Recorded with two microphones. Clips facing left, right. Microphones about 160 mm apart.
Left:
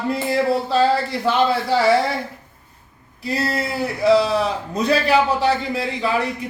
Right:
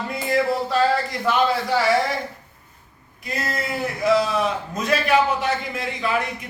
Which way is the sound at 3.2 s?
30° left (ahead or behind).